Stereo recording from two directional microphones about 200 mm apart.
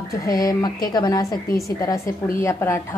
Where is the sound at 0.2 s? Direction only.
20° left (ahead or behind).